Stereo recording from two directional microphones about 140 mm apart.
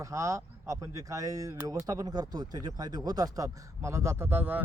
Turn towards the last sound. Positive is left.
turn(degrees=-15)  # may be behind; listen again after turning